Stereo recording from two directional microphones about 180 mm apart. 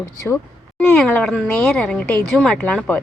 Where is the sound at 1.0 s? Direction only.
5° left (ahead or behind).